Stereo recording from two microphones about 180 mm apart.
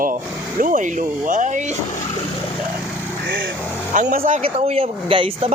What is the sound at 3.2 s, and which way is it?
Vehicle, 55° right (ahead or behind).